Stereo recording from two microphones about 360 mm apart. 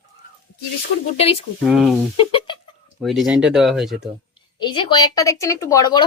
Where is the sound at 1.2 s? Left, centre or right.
Centre.